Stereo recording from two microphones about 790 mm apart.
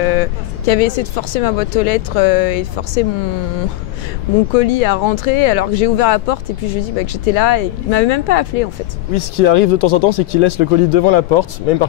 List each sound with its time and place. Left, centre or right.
0.0 s speech: left
4.6 s speech: left